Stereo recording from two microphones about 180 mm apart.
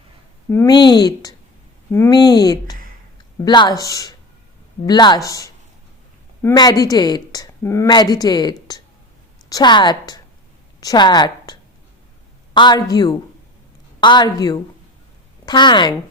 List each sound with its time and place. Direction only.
0.5 s a woman's voice: 20° left (ahead or behind)
12.5 s a woman's voice: 25° left (ahead or behind)